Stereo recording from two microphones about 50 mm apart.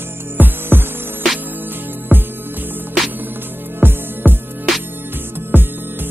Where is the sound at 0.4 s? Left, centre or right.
Right.